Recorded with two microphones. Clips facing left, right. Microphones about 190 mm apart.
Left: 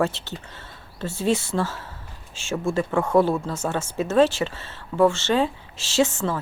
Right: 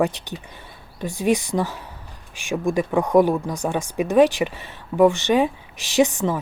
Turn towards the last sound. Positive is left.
turn(degrees=-15)  # may be behind; listen again after turning